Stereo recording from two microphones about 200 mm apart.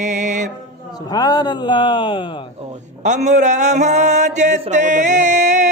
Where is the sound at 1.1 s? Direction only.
20° left (ahead or behind).